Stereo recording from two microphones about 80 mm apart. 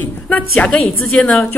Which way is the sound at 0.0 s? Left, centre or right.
Left.